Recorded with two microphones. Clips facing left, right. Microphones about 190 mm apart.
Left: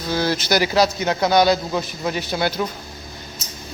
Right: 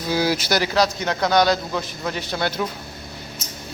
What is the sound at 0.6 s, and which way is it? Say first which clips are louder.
A man's voice: left 2 dB; 10° left (ahead or behind).